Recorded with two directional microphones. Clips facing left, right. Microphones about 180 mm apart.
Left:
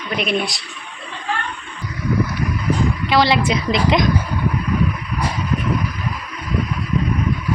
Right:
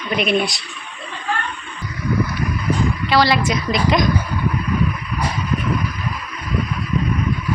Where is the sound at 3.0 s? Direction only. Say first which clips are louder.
Even; 20° left (ahead or behind).